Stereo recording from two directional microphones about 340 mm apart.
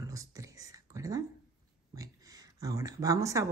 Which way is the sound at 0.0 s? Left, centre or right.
Centre.